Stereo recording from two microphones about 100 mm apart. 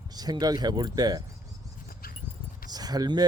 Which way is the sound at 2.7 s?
40° right (ahead or behind).